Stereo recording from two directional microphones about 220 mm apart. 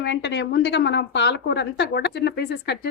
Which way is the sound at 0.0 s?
55° left (ahead or behind).